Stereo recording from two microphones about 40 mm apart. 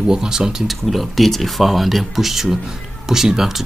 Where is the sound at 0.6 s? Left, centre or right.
Centre.